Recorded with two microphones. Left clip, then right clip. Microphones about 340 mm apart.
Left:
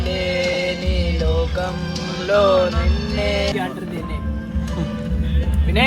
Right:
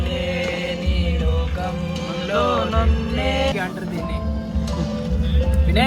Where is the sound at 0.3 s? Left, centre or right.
Left.